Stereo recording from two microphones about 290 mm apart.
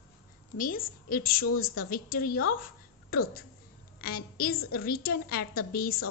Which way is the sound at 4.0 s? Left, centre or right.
Left.